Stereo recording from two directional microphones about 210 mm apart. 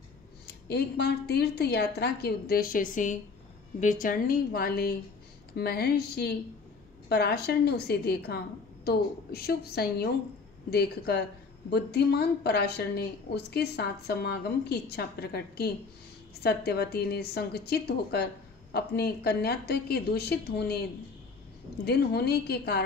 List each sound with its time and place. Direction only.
0.5 s a woman's voice: 50° left (ahead or behind)
21.8 s a woman's voice: 50° left (ahead or behind)